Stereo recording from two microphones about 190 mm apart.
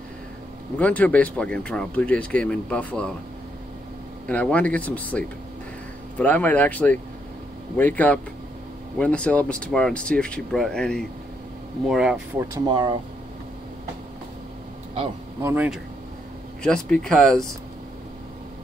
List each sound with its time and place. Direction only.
0.7 s speech: 10° left (ahead or behind)
4.3 s speech: 5° left (ahead or behind)
12.4 s speech: 20° right (ahead or behind)
15.4 s speech: 10° right (ahead or behind)
16.6 s speech: 5° left (ahead or behind)